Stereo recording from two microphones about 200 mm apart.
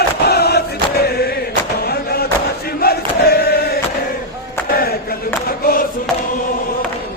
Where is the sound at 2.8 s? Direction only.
50° left (ahead or behind).